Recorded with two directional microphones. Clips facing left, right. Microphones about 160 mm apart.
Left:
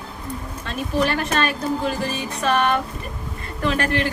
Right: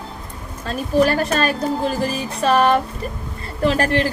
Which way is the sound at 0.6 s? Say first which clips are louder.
Right 5 dB; 40° right (ahead or behind).